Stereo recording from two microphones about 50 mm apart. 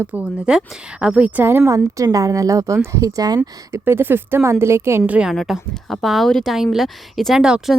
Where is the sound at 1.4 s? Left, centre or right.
Right.